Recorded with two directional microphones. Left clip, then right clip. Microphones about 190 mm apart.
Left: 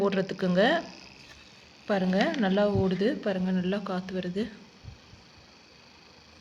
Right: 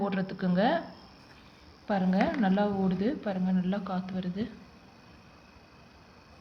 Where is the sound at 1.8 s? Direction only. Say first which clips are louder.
Left 2 dB; 60° left (ahead or behind).